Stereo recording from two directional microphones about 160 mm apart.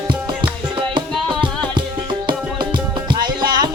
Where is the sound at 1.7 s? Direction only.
30° right (ahead or behind).